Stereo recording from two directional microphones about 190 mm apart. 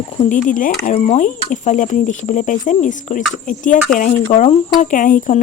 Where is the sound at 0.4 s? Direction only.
45° left (ahead or behind).